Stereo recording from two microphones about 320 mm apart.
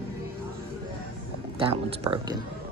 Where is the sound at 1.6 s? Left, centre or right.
Centre.